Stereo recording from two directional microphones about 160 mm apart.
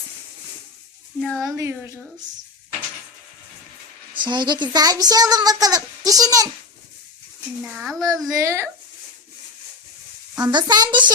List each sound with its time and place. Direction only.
1.2 s a child's voice: centre (ahead or behind)
1.5 s speech: 20° right (ahead or behind)
4.1 s a child's voice: 30° right (ahead or behind)
7.6 s a child's voice: centre (ahead or behind)
8.3 s speech: 20° right (ahead or behind)
10.3 s a child's voice: 25° right (ahead or behind)